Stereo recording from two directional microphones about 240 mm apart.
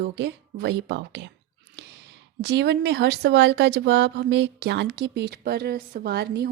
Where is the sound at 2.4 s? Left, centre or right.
Right.